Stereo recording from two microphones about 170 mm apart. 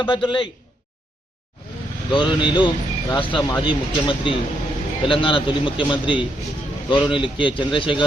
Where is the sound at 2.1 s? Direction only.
30° left (ahead or behind).